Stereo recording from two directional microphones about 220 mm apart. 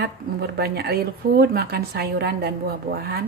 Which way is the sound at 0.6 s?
45° right (ahead or behind).